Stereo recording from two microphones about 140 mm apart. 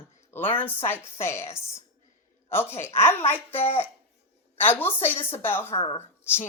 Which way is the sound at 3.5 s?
45° left (ahead or behind).